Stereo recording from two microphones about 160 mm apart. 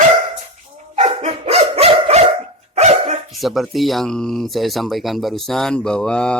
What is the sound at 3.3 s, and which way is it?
Speech, centre (ahead or behind).